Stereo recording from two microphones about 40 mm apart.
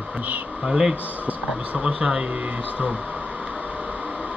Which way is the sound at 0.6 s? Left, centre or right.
Centre.